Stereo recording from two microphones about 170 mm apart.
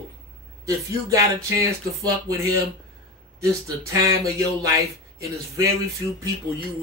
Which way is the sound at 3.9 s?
20° right (ahead or behind).